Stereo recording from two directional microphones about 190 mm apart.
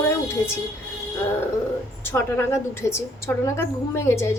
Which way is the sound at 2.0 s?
10° left (ahead or behind).